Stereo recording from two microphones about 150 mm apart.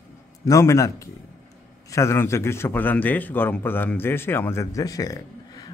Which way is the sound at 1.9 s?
20° left (ahead or behind).